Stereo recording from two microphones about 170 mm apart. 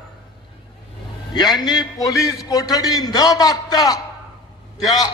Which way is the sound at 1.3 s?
25° left (ahead or behind).